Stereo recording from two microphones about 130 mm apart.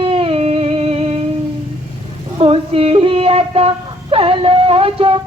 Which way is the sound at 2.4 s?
50° right (ahead or behind).